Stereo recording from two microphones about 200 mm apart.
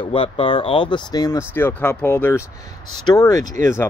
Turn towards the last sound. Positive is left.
turn(degrees=15)  # may be behind; listen again after turning